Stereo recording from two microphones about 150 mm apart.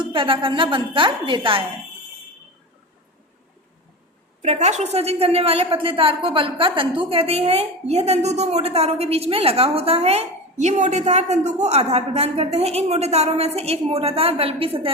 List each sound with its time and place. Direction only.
0.0 s a woman's voice: 35° right (ahead or behind)
4.4 s a woman's voice: 50° right (ahead or behind)